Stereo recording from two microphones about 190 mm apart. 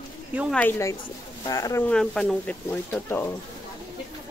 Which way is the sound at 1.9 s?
5° left (ahead or behind).